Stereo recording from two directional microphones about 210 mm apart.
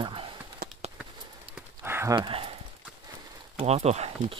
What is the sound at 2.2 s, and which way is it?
Speech, 25° right (ahead or behind).